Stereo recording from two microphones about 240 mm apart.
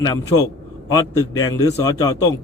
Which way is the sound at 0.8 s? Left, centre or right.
Centre.